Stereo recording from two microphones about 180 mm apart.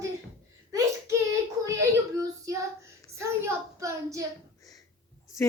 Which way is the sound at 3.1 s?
15° right (ahead or behind).